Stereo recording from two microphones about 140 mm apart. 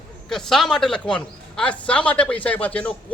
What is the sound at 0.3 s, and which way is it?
A man's voice, 5° left (ahead or behind).